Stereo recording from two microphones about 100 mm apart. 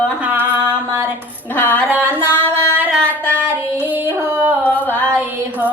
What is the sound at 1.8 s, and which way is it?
Music, 15° right (ahead or behind).